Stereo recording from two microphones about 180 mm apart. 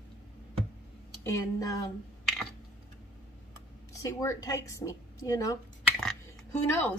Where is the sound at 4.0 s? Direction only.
15° left (ahead or behind).